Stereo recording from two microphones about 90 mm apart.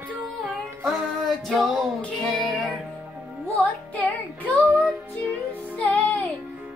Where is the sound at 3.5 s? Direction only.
15° left (ahead or behind).